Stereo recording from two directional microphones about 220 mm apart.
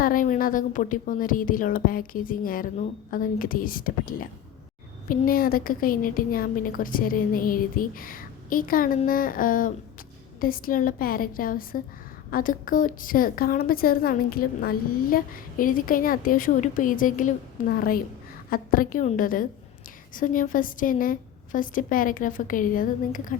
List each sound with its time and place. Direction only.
0.0 s a woman's voice: 40° left (ahead or behind)